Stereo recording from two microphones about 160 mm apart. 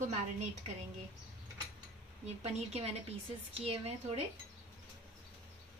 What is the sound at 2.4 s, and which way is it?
Speech, 40° right (ahead or behind).